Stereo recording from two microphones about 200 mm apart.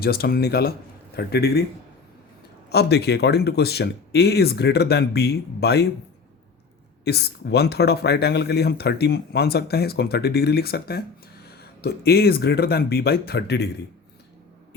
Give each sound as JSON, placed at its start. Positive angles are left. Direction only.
{"t": 0.0, "sound": "speech", "side_deg": 50}
{"t": 2.6, "sound": "speech", "side_deg": 55}
{"t": 7.0, "sound": "speech", "side_deg": 55}